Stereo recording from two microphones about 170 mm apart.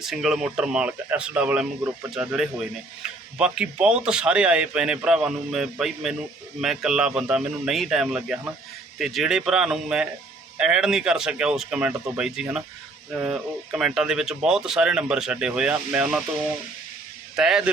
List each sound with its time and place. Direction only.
0.0 s speech: centre (ahead or behind)
17.3 s speech: 5° right (ahead or behind)